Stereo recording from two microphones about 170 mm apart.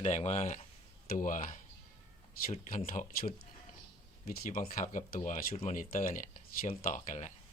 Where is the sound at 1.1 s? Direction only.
55° left (ahead or behind).